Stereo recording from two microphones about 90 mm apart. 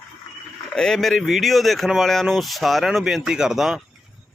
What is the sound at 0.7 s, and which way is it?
Speech, 5° left (ahead or behind).